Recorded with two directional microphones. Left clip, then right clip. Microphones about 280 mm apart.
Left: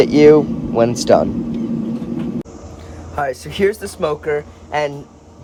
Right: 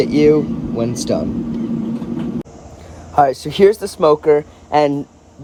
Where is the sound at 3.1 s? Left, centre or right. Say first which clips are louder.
Right 7 dB; right.